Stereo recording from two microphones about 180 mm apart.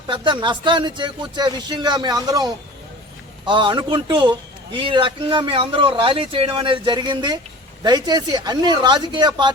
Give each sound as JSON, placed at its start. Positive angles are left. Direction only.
{"t": 0.1, "sound": "a man's voice", "side_deg": -25}